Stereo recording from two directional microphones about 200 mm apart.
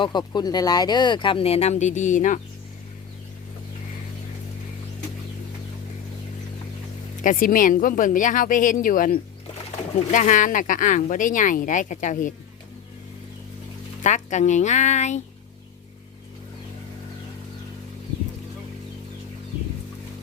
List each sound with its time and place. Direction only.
0.0 s speech: 20° left (ahead or behind); by 2.4 s 40° left (ahead or behind)
7.2 s speech: 40° left (ahead or behind)
14.0 s speech: 35° left (ahead or behind)